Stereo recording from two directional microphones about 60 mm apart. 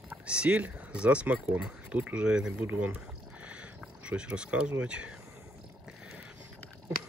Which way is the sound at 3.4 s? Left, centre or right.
Centre.